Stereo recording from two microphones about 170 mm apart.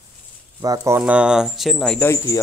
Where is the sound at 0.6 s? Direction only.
20° right (ahead or behind); by 2.0 s 5° left (ahead or behind).